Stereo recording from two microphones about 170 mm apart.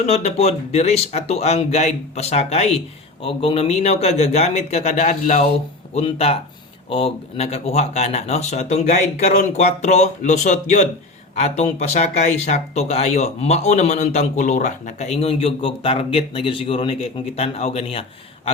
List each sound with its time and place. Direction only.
0.0 s speech: 40° left (ahead or behind)